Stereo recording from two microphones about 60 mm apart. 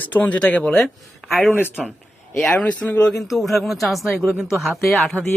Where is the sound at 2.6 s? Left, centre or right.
Left.